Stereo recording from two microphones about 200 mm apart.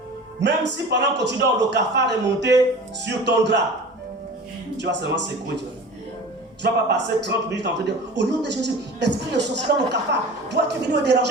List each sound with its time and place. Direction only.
0.3 s a man's voice: 60° right (ahead or behind)
4.8 s a man's voice: 60° right (ahead or behind)
6.6 s a man's voice: 60° right (ahead or behind)